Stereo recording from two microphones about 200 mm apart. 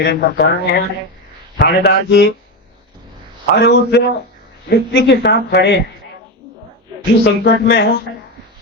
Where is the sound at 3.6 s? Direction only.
55° left (ahead or behind).